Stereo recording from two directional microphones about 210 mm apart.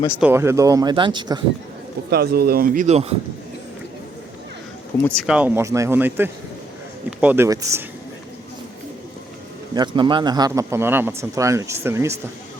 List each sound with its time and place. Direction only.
0.2 s speech: 10° right (ahead or behind)
2.0 s speech: 50° right (ahead or behind); by 3.2 s 30° right (ahead or behind)
5.0 s speech: centre (ahead or behind)
9.7 s speech: 20° right (ahead or behind)